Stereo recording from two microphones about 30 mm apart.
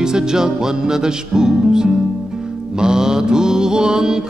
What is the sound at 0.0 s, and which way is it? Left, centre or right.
Music, right.